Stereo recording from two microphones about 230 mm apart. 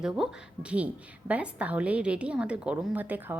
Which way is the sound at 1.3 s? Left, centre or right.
Centre.